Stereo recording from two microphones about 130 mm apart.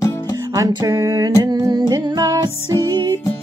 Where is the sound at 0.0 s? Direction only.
25° left (ahead or behind).